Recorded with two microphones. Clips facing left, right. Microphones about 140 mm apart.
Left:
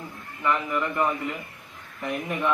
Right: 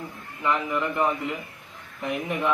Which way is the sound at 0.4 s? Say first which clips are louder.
Even; 15° right (ahead or behind).